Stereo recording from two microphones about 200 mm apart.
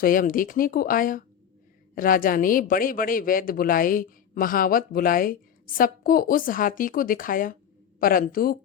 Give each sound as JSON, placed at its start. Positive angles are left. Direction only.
{"t": 0.0, "sound": "speech", "side_deg": 45}